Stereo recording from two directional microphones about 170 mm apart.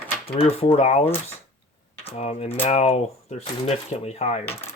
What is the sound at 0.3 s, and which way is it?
Speech, 35° left (ahead or behind).